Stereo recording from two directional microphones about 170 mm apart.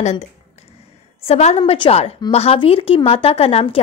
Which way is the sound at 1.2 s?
40° left (ahead or behind).